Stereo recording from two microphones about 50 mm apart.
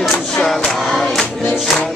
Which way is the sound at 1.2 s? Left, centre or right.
Left.